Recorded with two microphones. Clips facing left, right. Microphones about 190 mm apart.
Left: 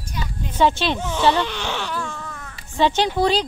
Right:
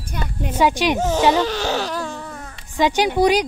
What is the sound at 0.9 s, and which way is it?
Speech, 40° right (ahead or behind).